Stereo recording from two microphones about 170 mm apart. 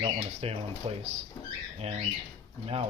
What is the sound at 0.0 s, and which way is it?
Speech, 35° right (ahead or behind).